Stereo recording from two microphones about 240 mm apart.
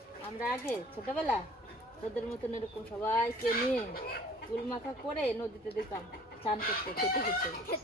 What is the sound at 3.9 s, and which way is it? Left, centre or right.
Speech, left.